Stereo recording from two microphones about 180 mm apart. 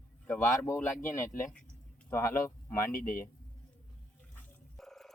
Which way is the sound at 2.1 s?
15° left (ahead or behind).